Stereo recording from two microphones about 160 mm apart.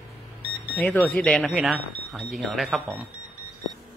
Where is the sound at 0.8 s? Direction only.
10° left (ahead or behind).